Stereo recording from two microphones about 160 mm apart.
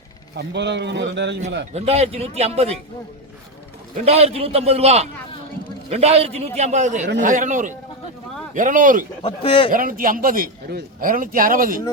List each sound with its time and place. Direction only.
0.3 s speech: 90° right
1.7 s speech: 40° right (ahead or behind)
4.0 s a man's voice: 40° right (ahead or behind); by 9.0 s 55° right (ahead or behind)
9.2 s a man's voice: 30° left (ahead or behind)
9.7 s a man's voice: 60° right (ahead or behind)